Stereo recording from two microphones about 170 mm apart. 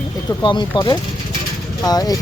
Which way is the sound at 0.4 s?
25° left (ahead or behind).